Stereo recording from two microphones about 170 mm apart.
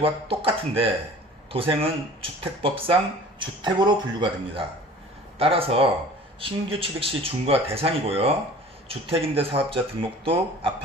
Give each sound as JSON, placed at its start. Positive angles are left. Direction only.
{"t": 0.0, "sound": "speech", "side_deg": -35}